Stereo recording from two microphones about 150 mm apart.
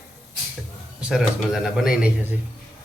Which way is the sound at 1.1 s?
5° right (ahead or behind).